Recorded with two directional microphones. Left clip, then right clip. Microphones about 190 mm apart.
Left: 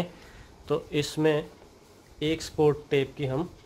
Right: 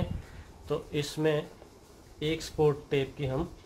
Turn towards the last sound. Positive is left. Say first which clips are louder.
# left 4 dB
turn(degrees=45)  # may be behind; listen again after turning